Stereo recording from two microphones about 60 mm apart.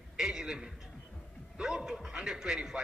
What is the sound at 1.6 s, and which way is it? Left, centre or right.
Speech, centre.